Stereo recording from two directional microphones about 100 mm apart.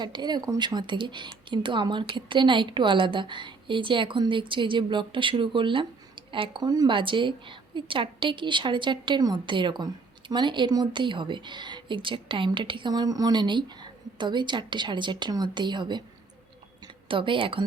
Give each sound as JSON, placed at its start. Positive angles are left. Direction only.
{"t": 0.0, "sound": "speech", "side_deg": -45}
{"t": 6.6, "sound": "speech", "side_deg": -40}
{"t": 6.9, "sound": "speech", "side_deg": -55}
{"t": 16.8, "sound": "a sound", "side_deg": -60}